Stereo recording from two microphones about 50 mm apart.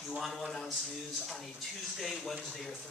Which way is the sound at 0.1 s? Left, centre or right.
Centre.